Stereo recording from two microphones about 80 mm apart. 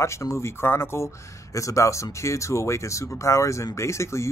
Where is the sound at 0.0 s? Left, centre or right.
Left.